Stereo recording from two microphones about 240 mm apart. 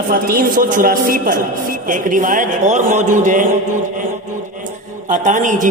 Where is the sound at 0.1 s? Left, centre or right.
Right.